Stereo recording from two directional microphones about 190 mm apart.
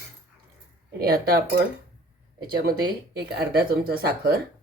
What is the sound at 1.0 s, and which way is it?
Speech, 55° right (ahead or behind).